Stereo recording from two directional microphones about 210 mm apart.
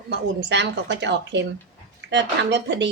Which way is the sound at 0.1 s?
55° right (ahead or behind).